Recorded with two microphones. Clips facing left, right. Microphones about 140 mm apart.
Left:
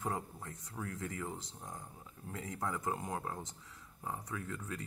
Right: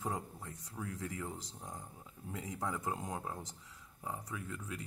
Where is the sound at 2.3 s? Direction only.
20° right (ahead or behind).